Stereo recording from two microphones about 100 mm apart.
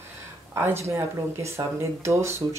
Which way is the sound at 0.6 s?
25° right (ahead or behind).